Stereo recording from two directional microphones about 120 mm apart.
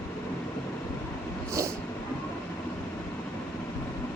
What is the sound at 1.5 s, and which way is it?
Vehicle, 25° right (ahead or behind).